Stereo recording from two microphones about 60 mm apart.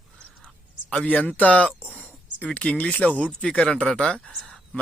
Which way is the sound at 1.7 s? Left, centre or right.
Right.